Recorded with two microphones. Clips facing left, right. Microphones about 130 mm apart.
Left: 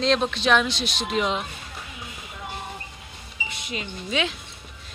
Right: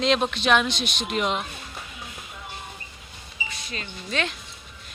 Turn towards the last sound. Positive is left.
turn(degrees=5)  # may be behind; listen again after turning